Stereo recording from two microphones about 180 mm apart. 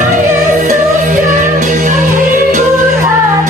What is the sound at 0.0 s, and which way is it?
Music, 45° right (ahead or behind).